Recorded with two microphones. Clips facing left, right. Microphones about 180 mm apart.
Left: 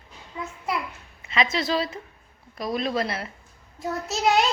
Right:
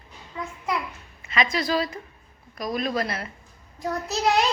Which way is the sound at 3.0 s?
25° left (ahead or behind).